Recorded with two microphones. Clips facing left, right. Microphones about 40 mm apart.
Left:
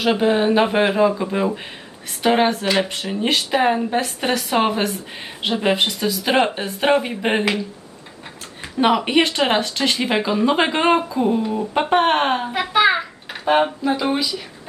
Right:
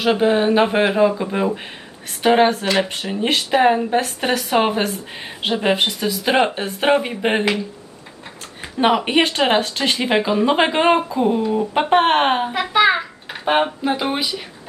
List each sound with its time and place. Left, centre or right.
0.0 s speech: centre
8.8 s speech: centre
12.5 s a sound: centre
13.4 s speech: centre
14.1 s speech: right